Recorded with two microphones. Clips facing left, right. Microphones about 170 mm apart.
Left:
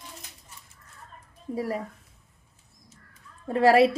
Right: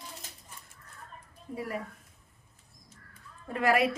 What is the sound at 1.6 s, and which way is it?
Speech, 35° left (ahead or behind).